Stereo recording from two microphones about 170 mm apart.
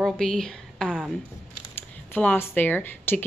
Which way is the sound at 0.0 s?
5° left (ahead or behind).